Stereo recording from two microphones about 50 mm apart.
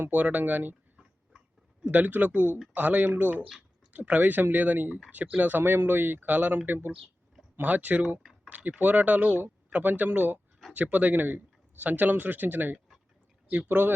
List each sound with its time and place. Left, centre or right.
0.0 s speech: right
1.8 s speech: right